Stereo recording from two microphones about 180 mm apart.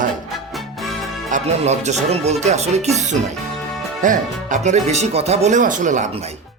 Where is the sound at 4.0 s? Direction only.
45° right (ahead or behind).